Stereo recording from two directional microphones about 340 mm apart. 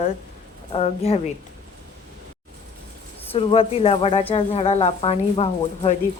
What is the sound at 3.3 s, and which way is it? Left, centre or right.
Speech, centre.